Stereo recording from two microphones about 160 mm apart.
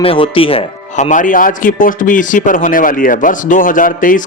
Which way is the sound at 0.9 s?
50° left (ahead or behind).